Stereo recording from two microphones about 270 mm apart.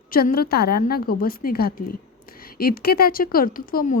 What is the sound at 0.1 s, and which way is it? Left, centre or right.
Speech, left.